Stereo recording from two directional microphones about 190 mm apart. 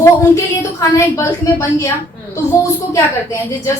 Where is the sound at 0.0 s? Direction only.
15° left (ahead or behind).